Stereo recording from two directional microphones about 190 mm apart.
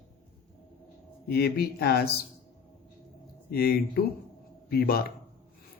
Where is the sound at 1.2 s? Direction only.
55° left (ahead or behind).